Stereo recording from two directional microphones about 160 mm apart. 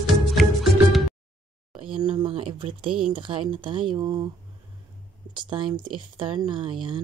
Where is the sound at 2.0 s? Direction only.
30° right (ahead or behind).